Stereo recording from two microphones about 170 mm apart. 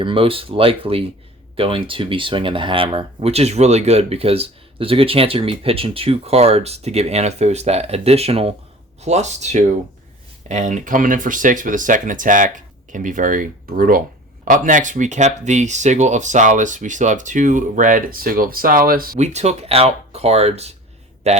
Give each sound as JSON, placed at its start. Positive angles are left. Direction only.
{"t": 0.0, "sound": "speech", "side_deg": -30}
{"t": 19.2, "sound": "speech", "side_deg": -40}